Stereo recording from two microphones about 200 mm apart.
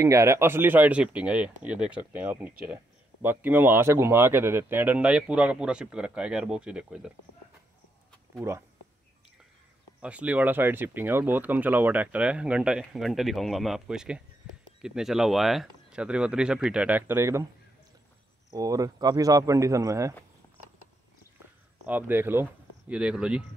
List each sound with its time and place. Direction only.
0.0 s speech: 15° right (ahead or behind)
8.4 s speech: 10° right (ahead or behind)
10.0 s speech: 5° right (ahead or behind)
18.5 s speech: 15° right (ahead or behind)
21.8 s speech: 10° right (ahead or behind)